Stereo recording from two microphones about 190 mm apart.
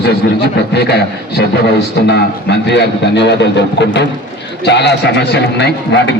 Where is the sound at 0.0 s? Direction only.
60° left (ahead or behind).